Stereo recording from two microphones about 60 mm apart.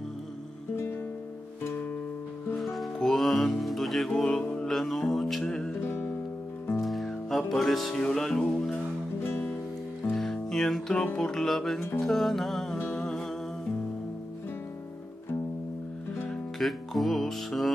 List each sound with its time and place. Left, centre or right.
2.6 s music: centre
4.4 s mantra: centre
4.6 s music: centre
5.7 s music: left
6.8 s music: centre
10.1 s music: centre
12.9 s humming: centre
16.3 s music: centre